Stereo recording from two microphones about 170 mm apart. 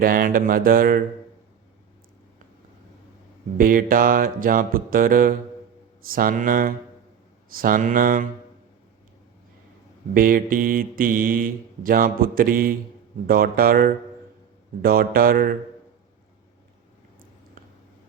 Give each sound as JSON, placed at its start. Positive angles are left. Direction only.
{"t": 0.0, "sound": "speech", "side_deg": -55}
{"t": 3.6, "sound": "speech", "side_deg": -55}
{"t": 7.5, "sound": "mantra", "side_deg": -55}
{"t": 10.2, "sound": "speech", "side_deg": -55}